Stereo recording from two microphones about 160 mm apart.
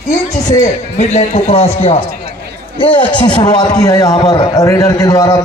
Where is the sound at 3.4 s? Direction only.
25° left (ahead or behind).